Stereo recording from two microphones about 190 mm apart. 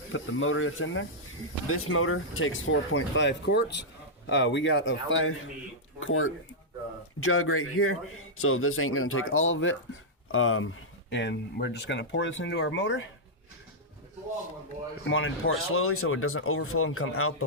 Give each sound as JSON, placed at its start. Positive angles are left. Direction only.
{"t": 0.1, "sound": "a man's voice", "side_deg": 90}
{"t": 4.3, "sound": "a man's voice", "side_deg": 80}
{"t": 11.1, "sound": "speech", "side_deg": 60}
{"t": 15.0, "sound": "a man's voice", "side_deg": 90}